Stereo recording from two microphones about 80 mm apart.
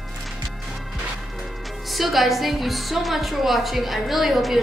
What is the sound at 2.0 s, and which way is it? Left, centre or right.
A woman's voice, centre.